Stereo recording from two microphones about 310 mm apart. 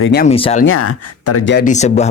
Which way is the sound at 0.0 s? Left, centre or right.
Left.